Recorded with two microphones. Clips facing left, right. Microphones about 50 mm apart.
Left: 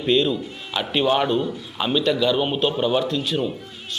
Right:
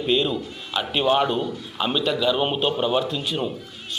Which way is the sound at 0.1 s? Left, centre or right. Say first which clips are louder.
Left 3 dB; centre.